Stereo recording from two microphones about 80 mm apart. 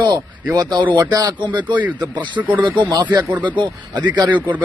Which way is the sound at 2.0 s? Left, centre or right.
Right.